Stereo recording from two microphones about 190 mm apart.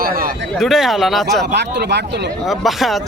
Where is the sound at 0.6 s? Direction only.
Centre (ahead or behind).